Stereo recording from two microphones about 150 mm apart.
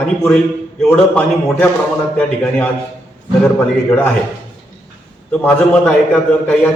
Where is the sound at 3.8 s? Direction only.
15° left (ahead or behind).